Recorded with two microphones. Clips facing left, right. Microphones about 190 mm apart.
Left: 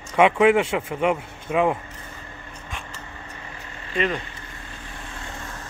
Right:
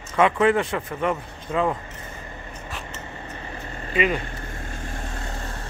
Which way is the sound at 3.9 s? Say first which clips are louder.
Right 2 dB; 5° right (ahead or behind).